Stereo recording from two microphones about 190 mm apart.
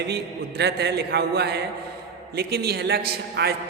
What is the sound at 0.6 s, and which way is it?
A man's voice, 60° right (ahead or behind).